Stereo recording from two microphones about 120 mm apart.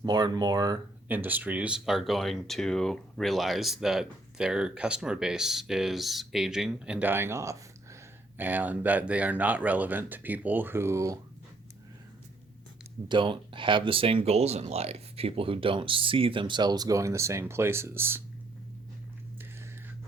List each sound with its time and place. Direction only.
0.0 s speech: 35° right (ahead or behind)
1.0 s speech: 15° right (ahead or behind)
13.1 s speech: 45° right (ahead or behind); by 18.2 s 20° right (ahead or behind)